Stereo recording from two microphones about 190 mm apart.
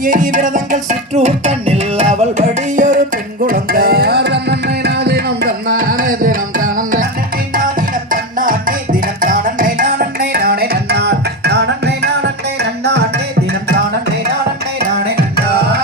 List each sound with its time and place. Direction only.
0.0 s music: 45° right (ahead or behind)
3.4 s tabla: 50° right (ahead or behind)
7.5 s music: 45° right (ahead or behind)
14.8 s music: 55° right (ahead or behind)